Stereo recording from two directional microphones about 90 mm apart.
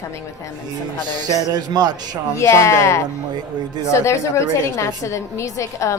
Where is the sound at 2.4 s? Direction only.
30° left (ahead or behind).